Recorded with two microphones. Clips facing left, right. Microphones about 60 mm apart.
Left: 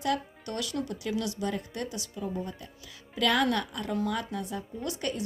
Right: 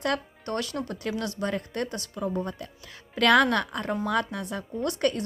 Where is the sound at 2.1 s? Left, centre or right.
Right.